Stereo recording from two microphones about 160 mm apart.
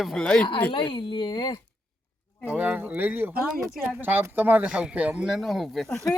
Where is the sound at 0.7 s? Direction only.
30° left (ahead or behind).